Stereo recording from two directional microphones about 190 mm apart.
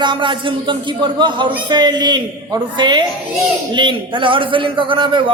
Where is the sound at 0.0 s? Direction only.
25° right (ahead or behind).